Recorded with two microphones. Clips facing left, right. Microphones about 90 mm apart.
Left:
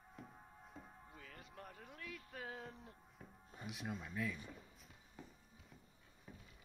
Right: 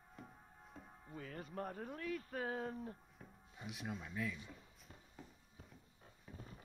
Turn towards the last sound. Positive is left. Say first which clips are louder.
# right 6 dB
turn(degrees=-40)  # may be behind; listen again after turning